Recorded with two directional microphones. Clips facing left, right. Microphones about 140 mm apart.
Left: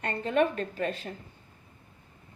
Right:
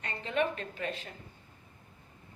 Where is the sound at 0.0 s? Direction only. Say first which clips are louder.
Left 6 dB; 50° left (ahead or behind).